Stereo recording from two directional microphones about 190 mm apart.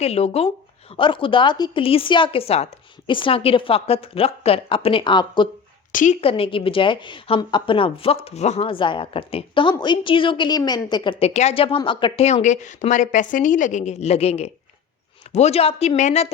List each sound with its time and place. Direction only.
0.0 s a woman's voice: 35° left (ahead or behind)
5.9 s a woman's voice: 45° left (ahead or behind)
6.2 s a woman's voice: 30° left (ahead or behind)